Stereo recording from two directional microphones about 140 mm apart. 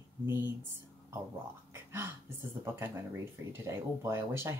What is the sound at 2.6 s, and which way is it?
Speech, 15° right (ahead or behind).